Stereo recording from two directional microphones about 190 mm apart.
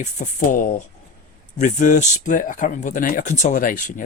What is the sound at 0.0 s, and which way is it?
Speech, 40° left (ahead or behind).